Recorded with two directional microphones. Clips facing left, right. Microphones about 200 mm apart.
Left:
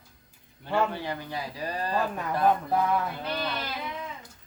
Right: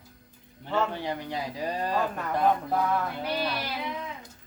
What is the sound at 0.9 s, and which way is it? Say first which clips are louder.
Speech: right 1 dB; 20° right (ahead or behind).